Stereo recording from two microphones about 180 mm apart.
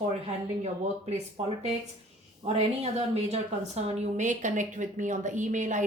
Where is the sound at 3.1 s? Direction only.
35° right (ahead or behind).